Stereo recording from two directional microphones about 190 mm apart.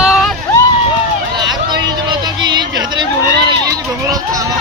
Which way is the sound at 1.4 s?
20° right (ahead or behind).